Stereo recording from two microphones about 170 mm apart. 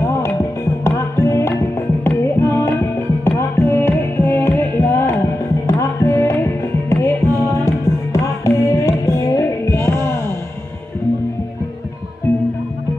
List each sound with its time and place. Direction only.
0.0 s music: 15° left (ahead or behind)